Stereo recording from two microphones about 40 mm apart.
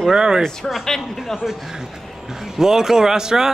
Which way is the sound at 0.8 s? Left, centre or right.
Centre.